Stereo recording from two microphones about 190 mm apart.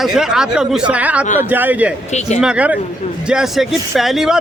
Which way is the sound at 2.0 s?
35° left (ahead or behind).